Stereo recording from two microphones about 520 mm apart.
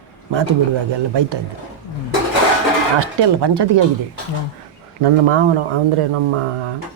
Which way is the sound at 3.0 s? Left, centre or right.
Right.